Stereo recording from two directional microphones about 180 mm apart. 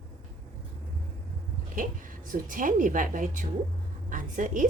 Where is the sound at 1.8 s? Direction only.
50° right (ahead or behind).